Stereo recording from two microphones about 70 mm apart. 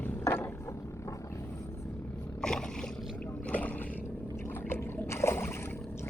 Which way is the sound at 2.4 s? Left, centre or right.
Centre.